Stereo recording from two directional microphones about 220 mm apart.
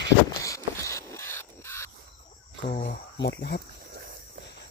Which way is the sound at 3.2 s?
50° left (ahead or behind).